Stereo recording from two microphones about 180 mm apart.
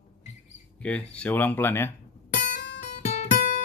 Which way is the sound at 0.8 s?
5° left (ahead or behind).